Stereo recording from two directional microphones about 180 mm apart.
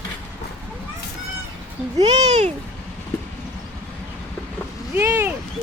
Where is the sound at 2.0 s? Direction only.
40° right (ahead or behind).